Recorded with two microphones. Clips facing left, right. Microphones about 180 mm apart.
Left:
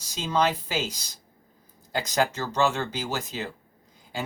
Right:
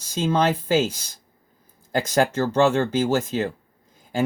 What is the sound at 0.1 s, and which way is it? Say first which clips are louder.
Speech: right 4 dB; 50° right (ahead or behind).